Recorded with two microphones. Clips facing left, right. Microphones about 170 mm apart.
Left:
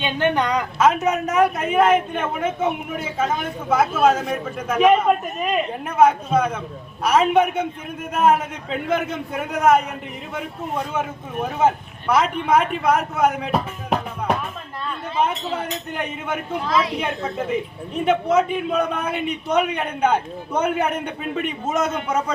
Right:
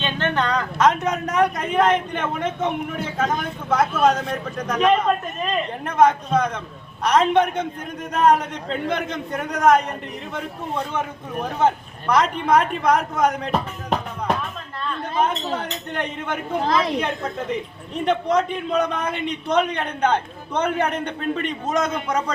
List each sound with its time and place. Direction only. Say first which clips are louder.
0.0 s a man's voice: left 2 dB; 10° left (ahead or behind)
16.6 s a woman's voice: right 1 dB; 45° right (ahead or behind)
17.0 s a man's voice: left 1 dB; 5° left (ahead or behind)